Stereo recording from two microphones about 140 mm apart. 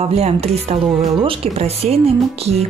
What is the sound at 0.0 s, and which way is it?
Speech, 45° right (ahead or behind).